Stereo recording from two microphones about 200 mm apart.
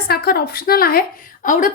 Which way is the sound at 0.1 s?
50° left (ahead or behind).